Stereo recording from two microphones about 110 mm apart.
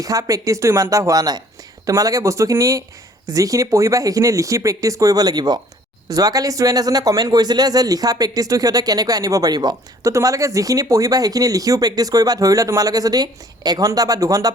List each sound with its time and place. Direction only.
0.0 s speech: 30° right (ahead or behind)